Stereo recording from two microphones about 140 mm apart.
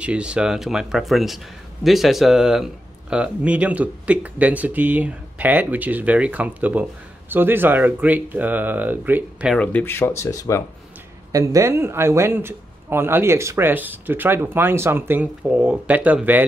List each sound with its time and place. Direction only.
0.0 s a man's voice: 10° right (ahead or behind)
9.6 s speech: 10° left (ahead or behind)
11.3 s a man's voice: 20° right (ahead or behind)